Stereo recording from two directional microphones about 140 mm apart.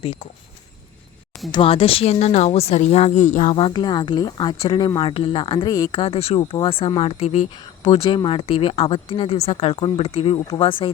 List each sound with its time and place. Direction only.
1.5 s speech: 35° left (ahead or behind); by 3.5 s 60° left (ahead or behind)
3.5 s speech: 35° left (ahead or behind)